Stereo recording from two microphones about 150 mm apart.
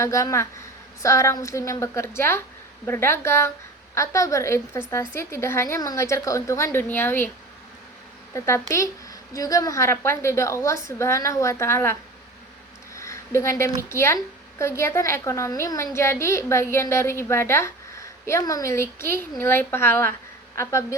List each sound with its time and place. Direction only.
0.0 s a woman's voice: 20° left (ahead or behind)
8.3 s a woman's voice: 20° left (ahead or behind)
12.9 s a sound: 20° left (ahead or behind)
13.9 s a woman's voice: 15° left (ahead or behind)